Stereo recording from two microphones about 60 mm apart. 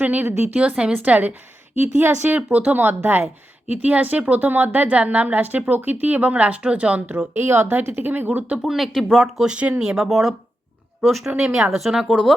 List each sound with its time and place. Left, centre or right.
0.0 s a woman's voice: right
7.3 s a woman's voice: right
8.6 s speech: centre
9.4 s speech: centre
9.8 s speech: centre